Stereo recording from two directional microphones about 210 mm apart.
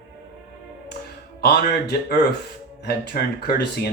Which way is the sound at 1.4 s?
50° left (ahead or behind).